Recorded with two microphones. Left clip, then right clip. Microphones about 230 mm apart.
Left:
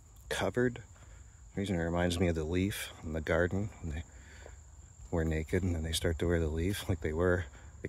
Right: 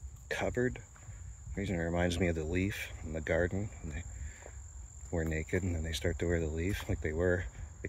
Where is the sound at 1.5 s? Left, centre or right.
Centre.